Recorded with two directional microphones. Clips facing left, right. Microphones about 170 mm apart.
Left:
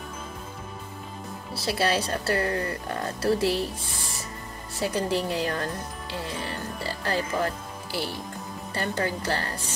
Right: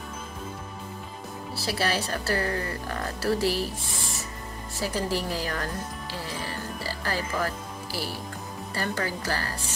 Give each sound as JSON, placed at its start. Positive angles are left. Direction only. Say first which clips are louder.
{"t": 1.6, "sound": "speech", "louder": "left 3 dB", "side_deg": 25}
{"t": 4.8, "sound": "speech", "louder": "left 2 dB", "side_deg": 25}